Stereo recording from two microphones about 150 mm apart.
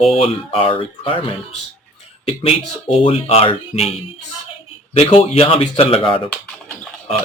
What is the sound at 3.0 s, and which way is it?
Speech, 45° left (ahead or behind).